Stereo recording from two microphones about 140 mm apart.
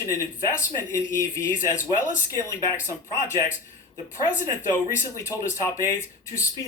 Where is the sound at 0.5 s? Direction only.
20° left (ahead or behind).